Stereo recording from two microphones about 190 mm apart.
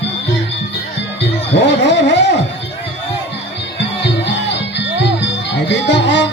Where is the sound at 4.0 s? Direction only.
65° left (ahead or behind).